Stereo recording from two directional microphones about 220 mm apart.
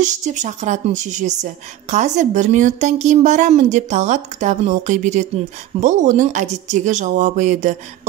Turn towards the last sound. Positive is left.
turn(degrees=-35)  # may be behind; listen again after turning